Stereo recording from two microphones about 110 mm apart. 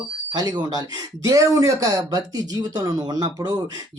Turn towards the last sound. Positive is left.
turn(degrees=-40)  # may be behind; listen again after turning